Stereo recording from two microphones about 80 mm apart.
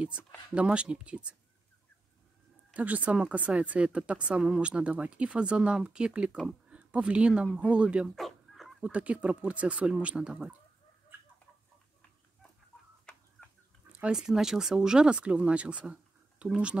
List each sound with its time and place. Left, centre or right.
0.6 s speech: centre
2.7 s speech: centre
8.2 s dog: centre
8.8 s speech: centre
13.9 s speech: centre